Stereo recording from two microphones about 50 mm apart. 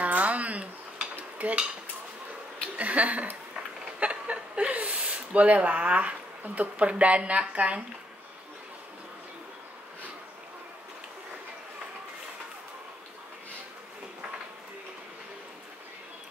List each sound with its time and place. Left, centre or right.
0.0 s a sound: right
1.4 s dishes: right
2.7 s speech: right